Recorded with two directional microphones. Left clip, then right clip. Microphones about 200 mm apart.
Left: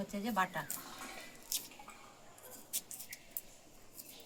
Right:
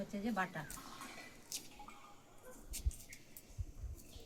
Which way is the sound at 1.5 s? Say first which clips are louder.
Left 6 dB; centre (ahead or behind).